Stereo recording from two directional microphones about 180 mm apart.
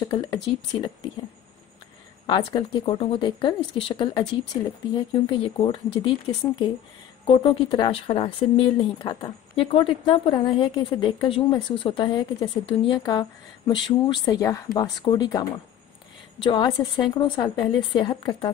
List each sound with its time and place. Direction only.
0.1 s speech: 25° left (ahead or behind)
2.2 s speech: 25° left (ahead or behind)
7.2 s speech: 25° left (ahead or behind)